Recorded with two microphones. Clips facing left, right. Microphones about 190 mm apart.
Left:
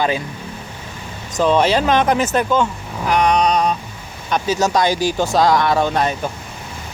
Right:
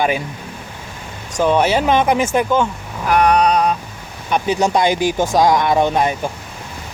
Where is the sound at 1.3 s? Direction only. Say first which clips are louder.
Even; 10° right (ahead or behind).